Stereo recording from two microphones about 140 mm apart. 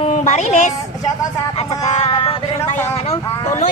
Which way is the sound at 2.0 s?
45° left (ahead or behind).